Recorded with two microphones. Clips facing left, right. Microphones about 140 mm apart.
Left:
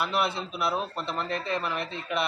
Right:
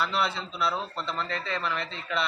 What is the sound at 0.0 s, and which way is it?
A man's voice, 15° left (ahead or behind).